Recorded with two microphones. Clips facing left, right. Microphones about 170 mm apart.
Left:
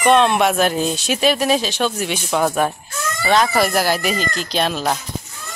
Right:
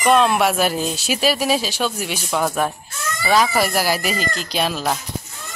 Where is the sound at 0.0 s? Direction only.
5° right (ahead or behind).